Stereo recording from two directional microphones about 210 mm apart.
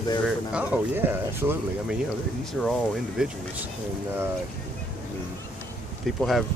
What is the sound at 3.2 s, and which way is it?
Speech, 5° right (ahead or behind).